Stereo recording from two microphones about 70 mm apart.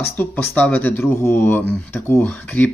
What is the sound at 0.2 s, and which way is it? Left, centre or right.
Speech, left.